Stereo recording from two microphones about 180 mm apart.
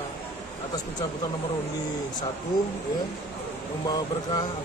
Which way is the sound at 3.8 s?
20° left (ahead or behind).